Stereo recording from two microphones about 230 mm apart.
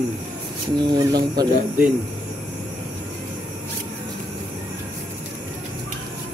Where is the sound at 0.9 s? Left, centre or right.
Centre.